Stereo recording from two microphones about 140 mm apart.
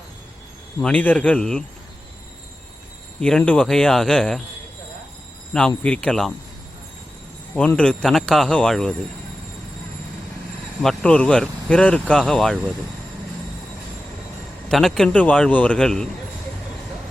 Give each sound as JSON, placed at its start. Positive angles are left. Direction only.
{"t": 0.8, "sound": "speech", "side_deg": 10}
{"t": 3.2, "sound": "a man's voice", "side_deg": 5}
{"t": 5.5, "sound": "speech", "side_deg": 5}
{"t": 7.5, "sound": "speech", "side_deg": 10}
{"t": 10.8, "sound": "speech", "side_deg": 10}
{"t": 14.7, "sound": "a man's voice", "side_deg": 0}